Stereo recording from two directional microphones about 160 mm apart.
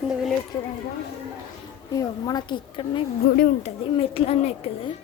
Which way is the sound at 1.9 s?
25° left (ahead or behind).